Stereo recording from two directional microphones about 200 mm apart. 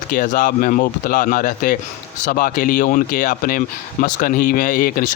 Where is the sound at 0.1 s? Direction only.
40° left (ahead or behind).